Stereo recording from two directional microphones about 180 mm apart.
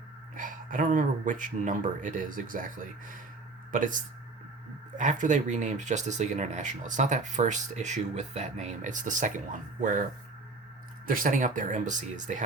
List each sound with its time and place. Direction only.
0.3 s speech: 50° right (ahead or behind)
11.0 s speech: 50° right (ahead or behind)